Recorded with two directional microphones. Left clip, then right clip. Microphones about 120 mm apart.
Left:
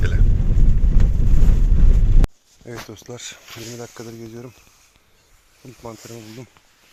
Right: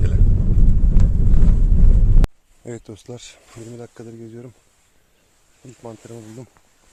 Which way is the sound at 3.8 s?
Centre (ahead or behind).